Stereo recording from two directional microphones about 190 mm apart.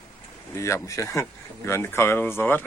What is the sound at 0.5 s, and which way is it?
Speech, 15° left (ahead or behind).